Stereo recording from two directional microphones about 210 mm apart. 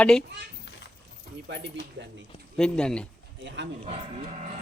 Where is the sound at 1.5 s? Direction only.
55° right (ahead or behind).